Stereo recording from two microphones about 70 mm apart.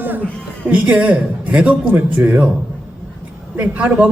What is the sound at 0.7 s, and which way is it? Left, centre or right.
A man's voice, centre.